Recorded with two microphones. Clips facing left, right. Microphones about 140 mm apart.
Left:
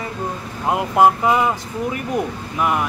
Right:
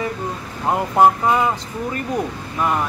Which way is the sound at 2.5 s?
5° left (ahead or behind).